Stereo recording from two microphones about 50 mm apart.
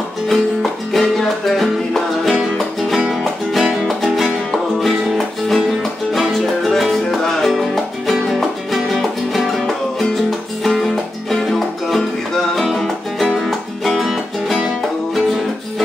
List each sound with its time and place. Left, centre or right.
0.3 s music: centre
10.6 s music: centre